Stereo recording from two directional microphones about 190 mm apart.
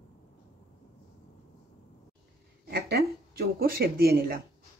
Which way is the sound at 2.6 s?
55° right (ahead or behind).